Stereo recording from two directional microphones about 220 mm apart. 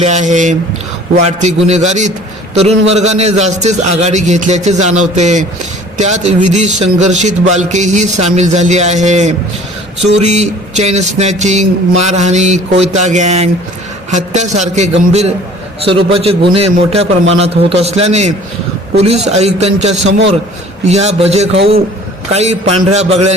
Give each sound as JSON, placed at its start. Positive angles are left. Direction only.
{"t": 0.0, "sound": "a man's voice", "side_deg": -30}